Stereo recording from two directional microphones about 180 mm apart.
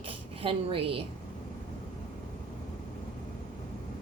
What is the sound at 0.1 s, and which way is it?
Speech, 30° right (ahead or behind).